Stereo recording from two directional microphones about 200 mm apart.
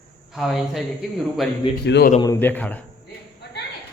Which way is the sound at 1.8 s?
55° left (ahead or behind).